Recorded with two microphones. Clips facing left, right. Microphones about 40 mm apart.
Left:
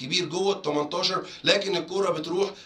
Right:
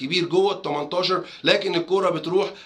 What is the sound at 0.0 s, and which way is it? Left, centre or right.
Speech, right.